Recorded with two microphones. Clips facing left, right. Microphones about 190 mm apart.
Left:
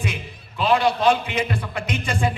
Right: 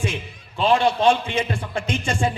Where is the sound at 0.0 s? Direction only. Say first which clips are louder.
Right 2 dB; 30° right (ahead or behind).